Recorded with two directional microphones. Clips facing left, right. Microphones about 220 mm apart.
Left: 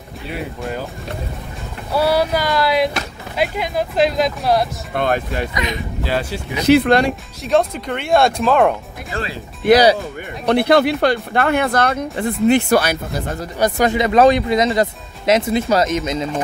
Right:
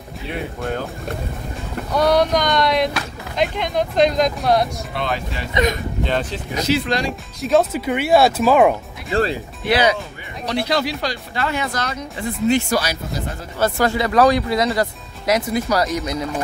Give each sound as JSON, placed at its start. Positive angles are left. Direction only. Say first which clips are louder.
{"t": 0.3, "sound": "speech", "louder": "right 1 dB", "side_deg": 0}
{"t": 1.9, "sound": "a sound", "louder": "even", "side_deg": 5}
{"t": 3.3, "sound": "speech", "louder": "even", "side_deg": 5}
{"t": 4.9, "sound": "speech", "louder": "left 7 dB", "side_deg": 50}
{"t": 6.0, "sound": "speech", "louder": "left 1 dB", "side_deg": 5}
{"t": 6.6, "sound": "speech", "louder": "left 8 dB", "side_deg": 60}
{"t": 7.4, "sound": "speech", "louder": "right 1 dB", "side_deg": -5}
{"t": 9.7, "sound": "speech", "louder": "left 6 dB", "side_deg": 40}
{"t": 10.4, "sound": "speech", "louder": "left 7 dB", "side_deg": 55}
{"t": 13.6, "sound": "speech", "louder": "left 2 dB", "side_deg": 15}